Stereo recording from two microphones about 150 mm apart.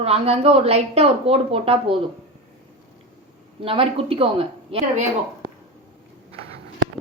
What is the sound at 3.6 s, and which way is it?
Speech, 40° right (ahead or behind).